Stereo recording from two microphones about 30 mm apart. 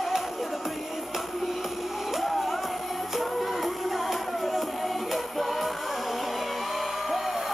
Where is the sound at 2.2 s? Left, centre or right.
Centre.